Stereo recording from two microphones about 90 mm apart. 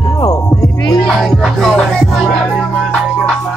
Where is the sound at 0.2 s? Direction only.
45° left (ahead or behind).